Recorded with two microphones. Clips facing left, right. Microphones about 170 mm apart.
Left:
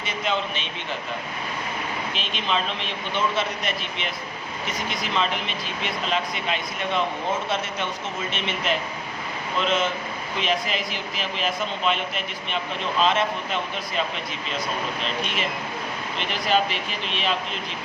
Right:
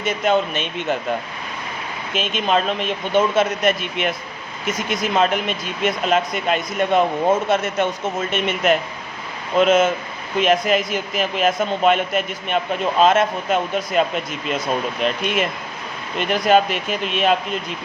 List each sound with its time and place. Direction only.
0.0 s a man's voice: 50° right (ahead or behind)
2.1 s a man's voice: 45° right (ahead or behind)
16.1 s a man's voice: 50° right (ahead or behind)